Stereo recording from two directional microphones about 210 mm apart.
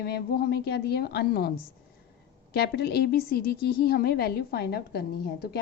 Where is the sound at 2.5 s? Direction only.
50° left (ahead or behind).